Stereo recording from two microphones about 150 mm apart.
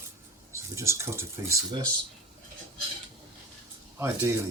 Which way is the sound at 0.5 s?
20° right (ahead or behind).